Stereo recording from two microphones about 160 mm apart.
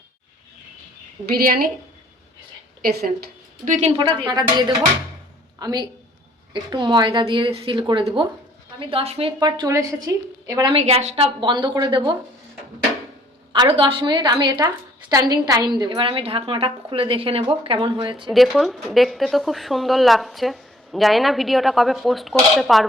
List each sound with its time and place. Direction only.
1.4 s a woman's voice: 65° right (ahead or behind)
2.8 s a woman's voice: 80° right
3.7 s a woman's voice: 45° right (ahead or behind)
3.9 s a woman's voice: 30° right (ahead or behind)
9.5 s a woman's voice: 20° right (ahead or behind)
10.8 s a woman's voice: 40° right (ahead or behind)
13.5 s a woman's voice: 30° right (ahead or behind)
18.3 s speech: centre (ahead or behind)